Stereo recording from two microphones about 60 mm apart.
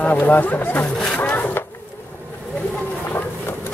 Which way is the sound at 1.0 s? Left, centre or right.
Centre.